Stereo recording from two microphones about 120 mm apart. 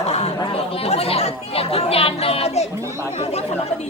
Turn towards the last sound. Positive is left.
turn(degrees=60)  # may be behind; listen again after turning